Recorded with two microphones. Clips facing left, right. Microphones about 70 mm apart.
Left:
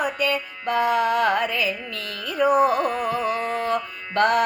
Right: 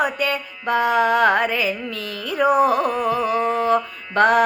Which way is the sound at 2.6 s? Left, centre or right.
Left.